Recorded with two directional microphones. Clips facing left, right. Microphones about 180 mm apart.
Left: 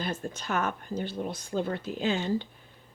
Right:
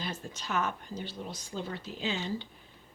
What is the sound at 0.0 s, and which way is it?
Speech, 50° left (ahead or behind).